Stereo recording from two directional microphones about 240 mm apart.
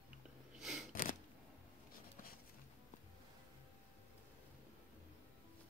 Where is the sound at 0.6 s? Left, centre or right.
Centre.